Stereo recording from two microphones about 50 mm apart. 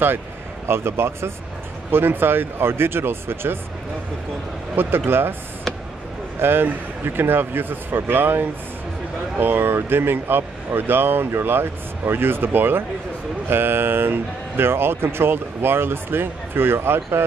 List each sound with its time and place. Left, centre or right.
0.7 s speech: right
1.9 s speech: right
4.7 s speech: right
6.4 s speech: right